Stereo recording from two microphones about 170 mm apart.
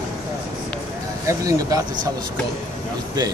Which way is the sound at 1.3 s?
20° right (ahead or behind).